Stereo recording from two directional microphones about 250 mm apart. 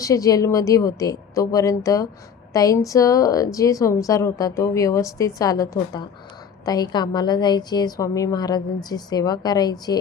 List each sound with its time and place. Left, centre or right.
0.0 s a woman's voice: centre